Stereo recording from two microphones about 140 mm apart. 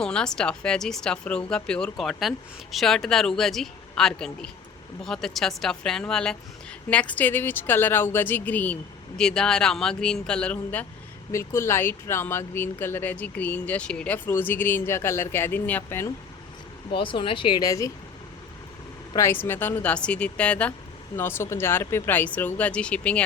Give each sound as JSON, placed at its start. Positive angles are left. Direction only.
{"t": 0.0, "sound": "speech", "side_deg": 5}
{"t": 16.9, "sound": "speech", "side_deg": 35}
{"t": 19.1, "sound": "speech", "side_deg": 15}